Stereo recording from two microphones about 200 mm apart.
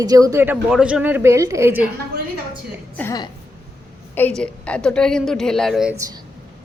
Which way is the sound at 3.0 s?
15° left (ahead or behind).